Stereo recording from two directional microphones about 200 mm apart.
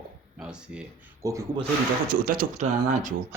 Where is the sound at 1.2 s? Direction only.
15° right (ahead or behind).